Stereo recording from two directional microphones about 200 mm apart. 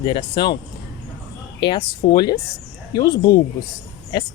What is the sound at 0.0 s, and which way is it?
Speech, 25° left (ahead or behind).